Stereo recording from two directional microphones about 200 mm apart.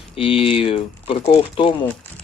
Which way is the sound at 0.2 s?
25° left (ahead or behind).